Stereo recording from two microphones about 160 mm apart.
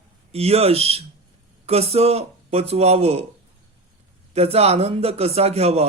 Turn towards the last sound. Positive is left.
turn(degrees=-40)  # may be behind; listen again after turning